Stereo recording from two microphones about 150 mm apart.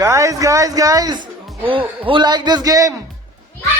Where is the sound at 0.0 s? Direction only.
20° right (ahead or behind).